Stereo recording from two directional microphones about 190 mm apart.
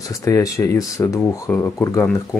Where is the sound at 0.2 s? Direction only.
15° left (ahead or behind).